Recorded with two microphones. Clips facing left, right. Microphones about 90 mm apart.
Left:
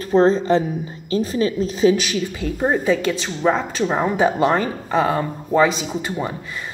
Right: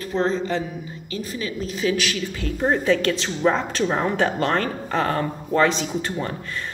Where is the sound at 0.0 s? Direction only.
25° left (ahead or behind).